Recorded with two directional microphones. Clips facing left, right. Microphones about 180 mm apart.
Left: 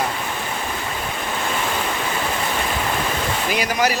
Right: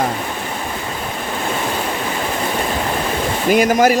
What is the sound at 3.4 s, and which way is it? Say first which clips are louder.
Speech: right 10 dB; 50° right (ahead or behind).